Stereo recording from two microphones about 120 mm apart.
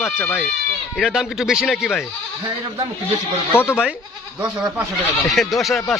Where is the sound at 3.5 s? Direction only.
20° left (ahead or behind).